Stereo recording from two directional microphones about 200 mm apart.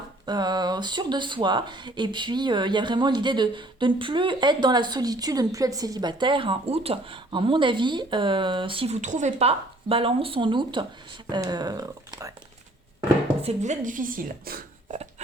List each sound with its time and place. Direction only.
0.3 s speech: 20° right (ahead or behind)
13.4 s speech: 35° right (ahead or behind)